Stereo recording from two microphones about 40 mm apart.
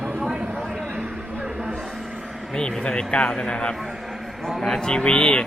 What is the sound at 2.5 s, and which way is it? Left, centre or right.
Speech, left.